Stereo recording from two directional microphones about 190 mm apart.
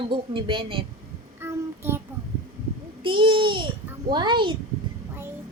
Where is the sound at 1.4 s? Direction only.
10° right (ahead or behind).